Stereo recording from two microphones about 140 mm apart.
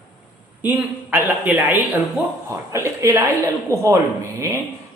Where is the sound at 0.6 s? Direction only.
10° right (ahead or behind).